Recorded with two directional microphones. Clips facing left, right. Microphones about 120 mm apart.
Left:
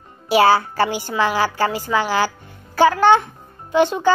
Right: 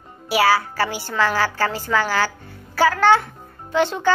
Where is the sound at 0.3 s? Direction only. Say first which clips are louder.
Left 4 dB; 25° left (ahead or behind).